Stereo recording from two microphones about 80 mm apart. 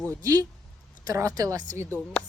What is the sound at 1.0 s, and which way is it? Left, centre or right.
Speech, right.